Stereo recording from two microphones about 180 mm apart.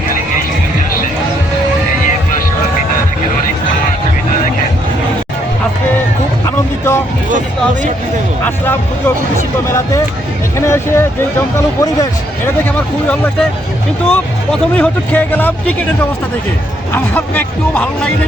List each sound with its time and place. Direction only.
6.4 s music: 15° left (ahead or behind)
7.3 s music: 45° right (ahead or behind)
8.4 s speech: 10° left (ahead or behind)
10.7 s speech: 15° left (ahead or behind)
14.1 s speech: 10° left (ahead or behind)
16.9 s speech: 10° left (ahead or behind)